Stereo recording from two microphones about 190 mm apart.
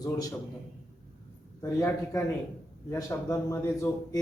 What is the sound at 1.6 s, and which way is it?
A man's voice, 15° left (ahead or behind).